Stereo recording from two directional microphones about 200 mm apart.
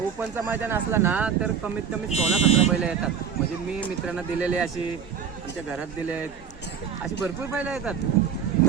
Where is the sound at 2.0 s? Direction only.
30° left (ahead or behind).